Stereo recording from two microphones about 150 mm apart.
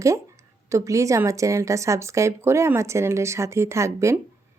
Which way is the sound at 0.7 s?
20° right (ahead or behind).